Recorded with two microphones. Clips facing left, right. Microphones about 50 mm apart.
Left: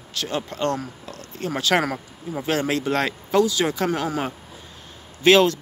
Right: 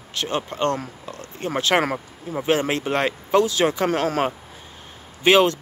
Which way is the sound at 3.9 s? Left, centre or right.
Right.